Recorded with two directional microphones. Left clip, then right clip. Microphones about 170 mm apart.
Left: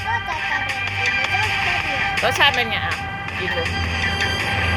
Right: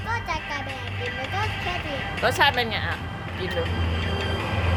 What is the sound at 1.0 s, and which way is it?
Music, 40° left (ahead or behind).